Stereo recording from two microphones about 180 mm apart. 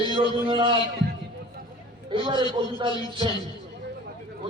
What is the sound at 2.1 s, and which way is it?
A man's voice, 25° right (ahead or behind).